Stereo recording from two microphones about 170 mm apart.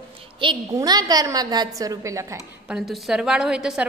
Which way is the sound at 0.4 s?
25° right (ahead or behind).